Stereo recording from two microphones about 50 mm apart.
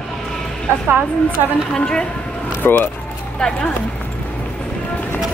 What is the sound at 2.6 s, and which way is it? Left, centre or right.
Speech, left.